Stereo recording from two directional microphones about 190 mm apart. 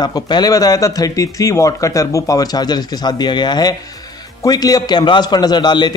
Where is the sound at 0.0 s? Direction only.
20° left (ahead or behind).